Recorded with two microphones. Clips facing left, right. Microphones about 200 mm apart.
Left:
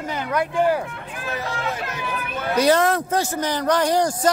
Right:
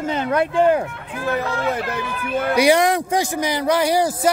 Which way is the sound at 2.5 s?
15° right (ahead or behind).